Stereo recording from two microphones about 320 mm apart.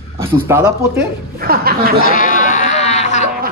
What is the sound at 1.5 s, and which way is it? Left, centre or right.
Speech, right.